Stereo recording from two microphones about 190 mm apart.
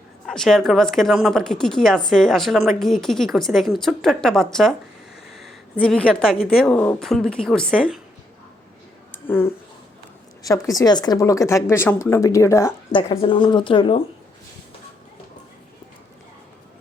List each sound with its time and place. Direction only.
0.3 s speech: centre (ahead or behind)
9.1 s a sound: 10° left (ahead or behind)
10.4 s a woman's voice: 20° left (ahead or behind)